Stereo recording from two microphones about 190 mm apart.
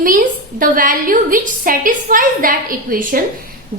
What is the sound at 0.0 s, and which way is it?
A woman's voice, 45° right (ahead or behind).